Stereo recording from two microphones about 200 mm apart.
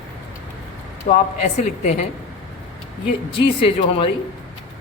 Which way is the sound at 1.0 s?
35° left (ahead or behind).